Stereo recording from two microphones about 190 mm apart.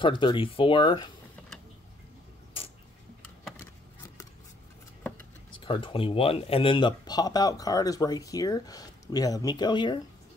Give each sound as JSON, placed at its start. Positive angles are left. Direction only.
{"t": 0.0, "sound": "speech", "side_deg": 25}
{"t": 5.6, "sound": "speech", "side_deg": 25}